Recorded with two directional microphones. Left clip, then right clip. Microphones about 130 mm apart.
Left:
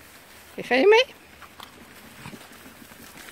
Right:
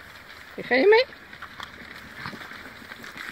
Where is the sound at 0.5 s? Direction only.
25° left (ahead or behind).